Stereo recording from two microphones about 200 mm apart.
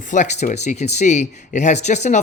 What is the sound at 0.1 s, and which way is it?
Speech, 35° left (ahead or behind).